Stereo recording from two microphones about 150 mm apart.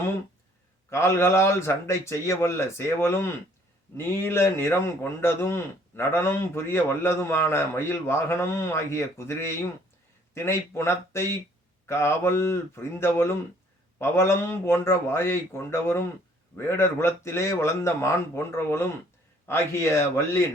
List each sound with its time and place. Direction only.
0.9 s a man's voice: 15° left (ahead or behind)